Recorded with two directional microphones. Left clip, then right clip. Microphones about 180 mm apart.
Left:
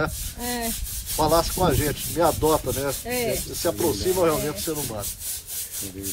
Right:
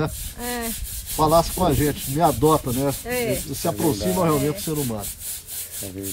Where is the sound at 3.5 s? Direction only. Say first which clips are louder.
Even; 50° right (ahead or behind).